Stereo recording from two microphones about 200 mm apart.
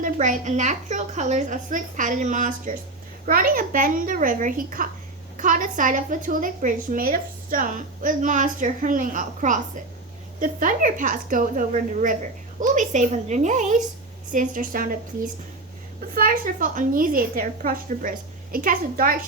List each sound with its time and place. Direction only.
0.0 s a woman's voice: 40° right (ahead or behind)